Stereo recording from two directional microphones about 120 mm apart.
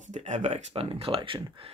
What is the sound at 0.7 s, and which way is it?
Speech, 55° right (ahead or behind).